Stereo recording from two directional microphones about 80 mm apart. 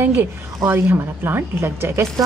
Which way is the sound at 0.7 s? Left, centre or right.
Right.